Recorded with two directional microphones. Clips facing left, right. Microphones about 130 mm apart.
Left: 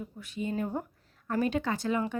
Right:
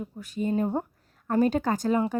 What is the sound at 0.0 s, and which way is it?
A woman's voice, 40° right (ahead or behind).